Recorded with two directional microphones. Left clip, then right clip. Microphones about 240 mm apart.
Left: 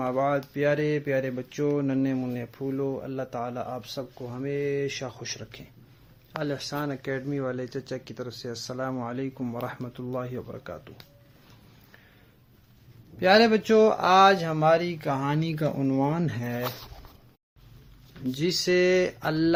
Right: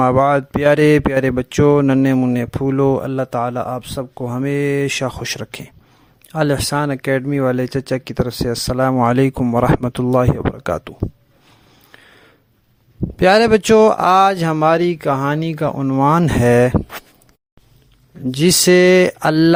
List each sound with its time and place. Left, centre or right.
0.0 s speech: right
13.1 s speech: right
18.3 s speech: right